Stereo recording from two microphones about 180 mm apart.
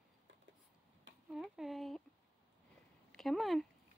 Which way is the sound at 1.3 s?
Centre (ahead or behind).